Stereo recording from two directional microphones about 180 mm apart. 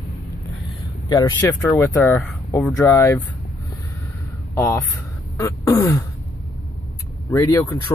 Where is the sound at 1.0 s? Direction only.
20° left (ahead or behind).